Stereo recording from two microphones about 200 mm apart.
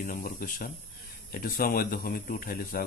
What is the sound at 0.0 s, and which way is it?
Speech, 45° left (ahead or behind).